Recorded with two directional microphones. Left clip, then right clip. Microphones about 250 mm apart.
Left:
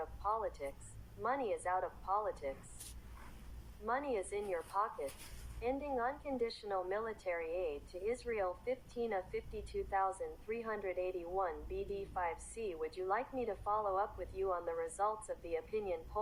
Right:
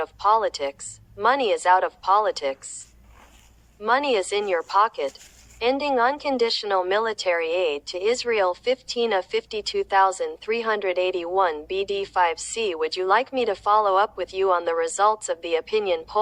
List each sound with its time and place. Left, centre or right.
0.0 s speech: right
3.8 s speech: right